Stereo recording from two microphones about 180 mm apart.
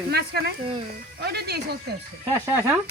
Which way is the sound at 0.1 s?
65° right (ahead or behind).